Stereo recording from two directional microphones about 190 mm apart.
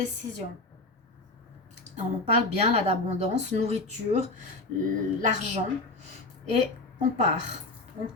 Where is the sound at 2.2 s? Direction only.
35° right (ahead or behind).